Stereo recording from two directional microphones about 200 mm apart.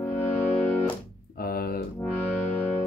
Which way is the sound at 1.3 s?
50° left (ahead or behind).